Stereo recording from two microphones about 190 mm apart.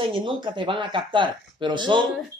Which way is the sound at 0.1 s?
25° right (ahead or behind).